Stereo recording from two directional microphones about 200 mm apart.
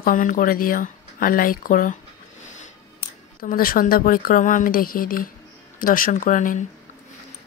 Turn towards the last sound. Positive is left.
turn(degrees=40)  # may be behind; listen again after turning